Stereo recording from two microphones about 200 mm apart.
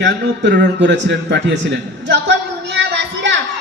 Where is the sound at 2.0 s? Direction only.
60° right (ahead or behind).